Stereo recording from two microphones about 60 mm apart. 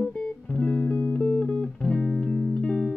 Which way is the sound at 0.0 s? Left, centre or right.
Centre.